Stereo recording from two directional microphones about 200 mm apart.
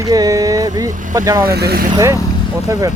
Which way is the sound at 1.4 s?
50° right (ahead or behind).